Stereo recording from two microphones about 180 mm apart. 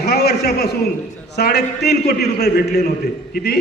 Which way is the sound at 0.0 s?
60° left (ahead or behind).